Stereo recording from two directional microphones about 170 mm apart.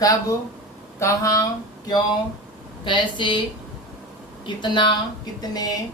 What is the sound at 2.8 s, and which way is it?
Speech, 30° left (ahead or behind).